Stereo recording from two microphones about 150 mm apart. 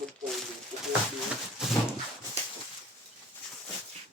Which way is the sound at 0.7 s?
50° right (ahead or behind).